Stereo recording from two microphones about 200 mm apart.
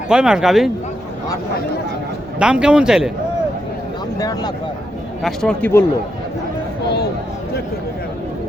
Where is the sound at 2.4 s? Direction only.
5° right (ahead or behind).